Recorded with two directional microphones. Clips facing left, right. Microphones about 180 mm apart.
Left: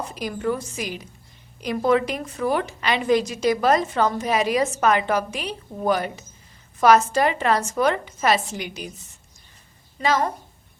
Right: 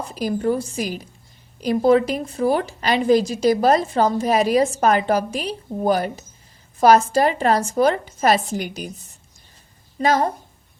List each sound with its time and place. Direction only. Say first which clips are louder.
0.1 s a woman's voice: right 6 dB; 35° right (ahead or behind)
10.0 s a woman's voice: right 3 dB; 40° right (ahead or behind)